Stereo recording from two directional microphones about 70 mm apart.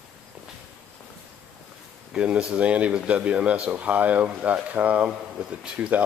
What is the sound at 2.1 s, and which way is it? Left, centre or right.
Speech, centre.